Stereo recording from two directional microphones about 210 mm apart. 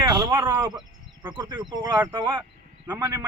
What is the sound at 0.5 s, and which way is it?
Speech, 10° right (ahead or behind).